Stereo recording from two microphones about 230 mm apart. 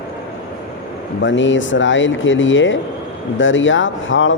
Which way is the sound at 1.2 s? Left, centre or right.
Left.